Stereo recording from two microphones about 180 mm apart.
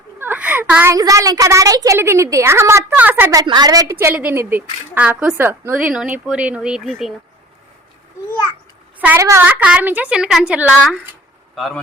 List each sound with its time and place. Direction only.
0.2 s a woman's voice: 10° right (ahead or behind)
9.0 s a woman's voice: 10° right (ahead or behind)